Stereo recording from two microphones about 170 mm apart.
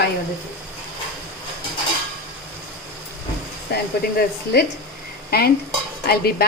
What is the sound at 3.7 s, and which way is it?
Speech, 70° left (ahead or behind).